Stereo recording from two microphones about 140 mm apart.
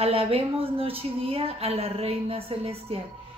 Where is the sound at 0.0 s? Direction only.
45° right (ahead or behind).